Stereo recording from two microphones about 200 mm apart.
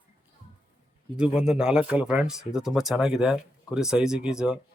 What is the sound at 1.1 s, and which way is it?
Speech, 5° right (ahead or behind).